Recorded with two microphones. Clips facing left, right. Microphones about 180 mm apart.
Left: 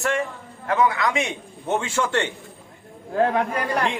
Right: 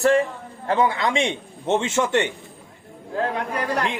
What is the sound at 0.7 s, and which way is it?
A man's voice, 30° right (ahead or behind).